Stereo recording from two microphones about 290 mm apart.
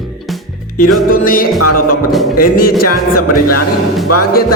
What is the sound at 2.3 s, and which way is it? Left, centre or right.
Speech, left.